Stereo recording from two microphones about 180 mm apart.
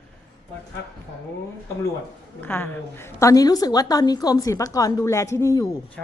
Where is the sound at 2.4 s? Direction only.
10° left (ahead or behind).